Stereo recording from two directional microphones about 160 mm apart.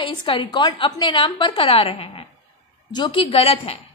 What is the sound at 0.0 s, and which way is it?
A woman's voice, 35° left (ahead or behind).